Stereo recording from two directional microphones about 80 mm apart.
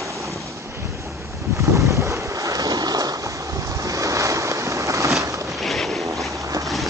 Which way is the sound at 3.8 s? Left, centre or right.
Right.